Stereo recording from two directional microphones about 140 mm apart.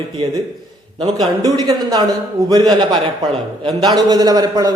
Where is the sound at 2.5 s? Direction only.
30° right (ahead or behind).